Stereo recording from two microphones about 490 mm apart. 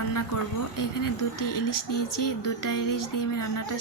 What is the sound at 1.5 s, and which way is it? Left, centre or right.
Speech, left.